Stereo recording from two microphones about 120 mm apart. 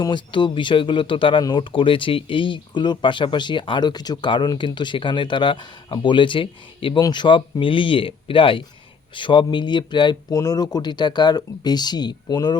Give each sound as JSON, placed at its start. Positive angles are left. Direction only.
{"t": 0.0, "sound": "speech", "side_deg": 40}